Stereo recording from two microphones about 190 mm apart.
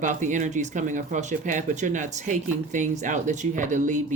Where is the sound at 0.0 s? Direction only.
40° right (ahead or behind).